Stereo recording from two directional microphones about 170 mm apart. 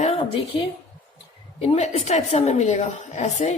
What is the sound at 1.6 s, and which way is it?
A woman's voice, 35° left (ahead or behind).